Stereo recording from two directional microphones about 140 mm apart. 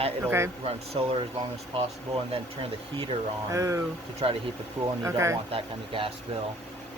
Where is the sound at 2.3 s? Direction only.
40° right (ahead or behind).